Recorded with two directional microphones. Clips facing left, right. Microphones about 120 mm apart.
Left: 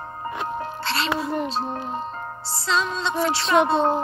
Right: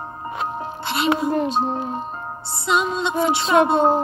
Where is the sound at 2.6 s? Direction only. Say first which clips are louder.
Right 3 dB; 15° right (ahead or behind).